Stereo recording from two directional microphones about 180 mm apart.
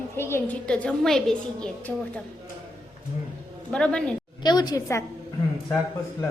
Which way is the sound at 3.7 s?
5° left (ahead or behind).